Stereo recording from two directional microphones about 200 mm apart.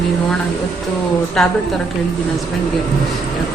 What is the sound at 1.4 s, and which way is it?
Speech, 5° left (ahead or behind).